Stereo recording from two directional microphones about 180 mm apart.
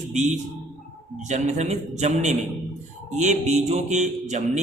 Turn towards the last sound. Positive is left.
turn(degrees=-40)  # may be behind; listen again after turning